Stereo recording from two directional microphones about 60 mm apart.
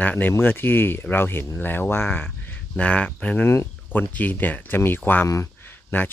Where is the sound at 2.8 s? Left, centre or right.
Left.